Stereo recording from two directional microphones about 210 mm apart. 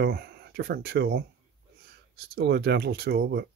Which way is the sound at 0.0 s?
50° right (ahead or behind).